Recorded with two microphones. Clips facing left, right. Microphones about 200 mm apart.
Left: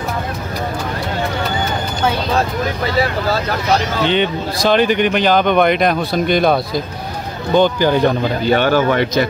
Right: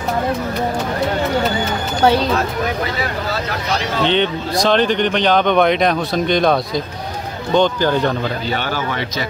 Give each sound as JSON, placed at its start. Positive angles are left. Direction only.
{"t": 4.0, "sound": "speech", "side_deg": 5}
{"t": 8.5, "sound": "speech", "side_deg": 55}